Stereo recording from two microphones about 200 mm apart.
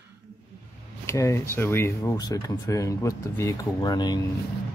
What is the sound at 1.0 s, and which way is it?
Speech, 15° left (ahead or behind).